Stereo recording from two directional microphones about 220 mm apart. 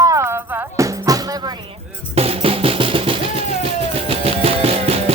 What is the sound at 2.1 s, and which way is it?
Music, 25° right (ahead or behind).